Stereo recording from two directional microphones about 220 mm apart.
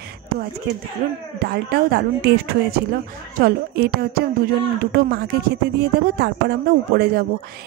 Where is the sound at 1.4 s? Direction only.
45° right (ahead or behind).